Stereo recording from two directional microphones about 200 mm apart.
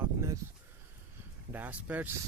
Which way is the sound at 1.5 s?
10° right (ahead or behind).